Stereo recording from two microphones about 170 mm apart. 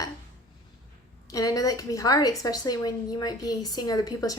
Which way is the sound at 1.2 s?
20° left (ahead or behind).